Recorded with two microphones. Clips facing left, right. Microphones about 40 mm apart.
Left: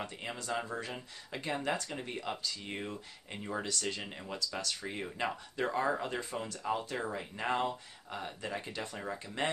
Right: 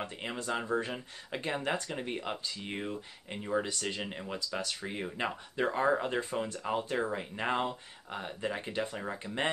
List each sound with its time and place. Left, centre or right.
0.0 s speech: right
1.9 s speech: centre
2.7 s speech: centre
8.9 s speech: centre